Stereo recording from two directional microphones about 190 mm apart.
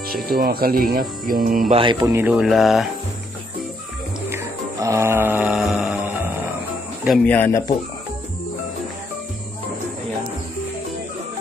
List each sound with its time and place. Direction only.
0.1 s speech: 50° right (ahead or behind)
1.7 s mantra: 25° right (ahead or behind)
2.3 s a sound: centre (ahead or behind)
4.3 s music: 15° right (ahead or behind)
7.1 s speech: 10° left (ahead or behind)